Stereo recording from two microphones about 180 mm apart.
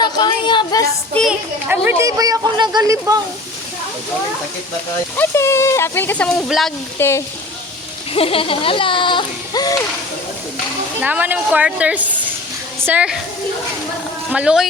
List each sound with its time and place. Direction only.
0.0 s a sound: 25° left (ahead or behind)
1.1 s a child's voice: centre (ahead or behind); by 3.2 s 20° right (ahead or behind)
5.1 s speech: 15° left (ahead or behind)
7.0 s speech: 10° left (ahead or behind)
8.1 s speech: 30° left (ahead or behind)
11.0 s a child's voice: 10° right (ahead or behind)
14.3 s speech: 5° right (ahead or behind)